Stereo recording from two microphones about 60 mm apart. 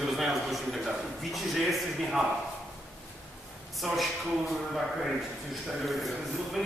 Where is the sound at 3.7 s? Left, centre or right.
Centre.